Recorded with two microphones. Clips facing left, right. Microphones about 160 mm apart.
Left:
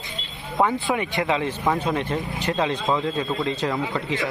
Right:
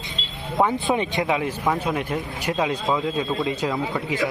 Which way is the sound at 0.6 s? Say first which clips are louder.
Right 1 dB; 20° right (ahead or behind).